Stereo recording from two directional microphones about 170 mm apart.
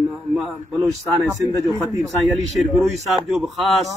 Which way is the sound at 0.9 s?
20° right (ahead or behind).